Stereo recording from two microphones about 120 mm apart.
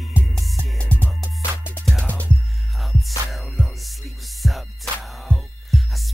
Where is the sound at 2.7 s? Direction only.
Centre (ahead or behind).